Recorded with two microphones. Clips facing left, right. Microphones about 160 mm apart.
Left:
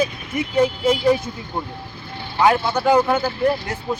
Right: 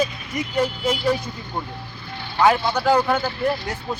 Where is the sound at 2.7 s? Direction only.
20° left (ahead or behind).